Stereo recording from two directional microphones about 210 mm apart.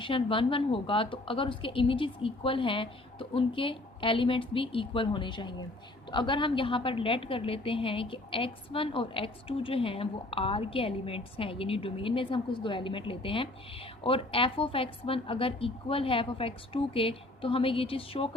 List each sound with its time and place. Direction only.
0.0 s a woman's voice: 25° left (ahead or behind)